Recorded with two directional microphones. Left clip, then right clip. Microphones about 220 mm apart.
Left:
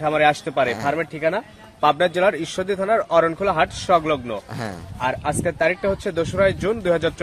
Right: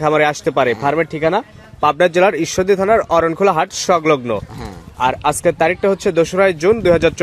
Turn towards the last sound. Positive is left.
turn(degrees=-35)  # may be behind; listen again after turning